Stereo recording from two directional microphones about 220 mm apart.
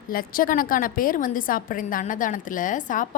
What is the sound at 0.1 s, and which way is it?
A woman's voice, 40° left (ahead or behind).